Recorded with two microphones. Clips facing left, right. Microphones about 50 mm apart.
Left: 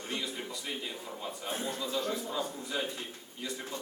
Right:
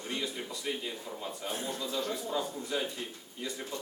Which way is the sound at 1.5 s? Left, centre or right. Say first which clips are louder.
Left 1 dB; left.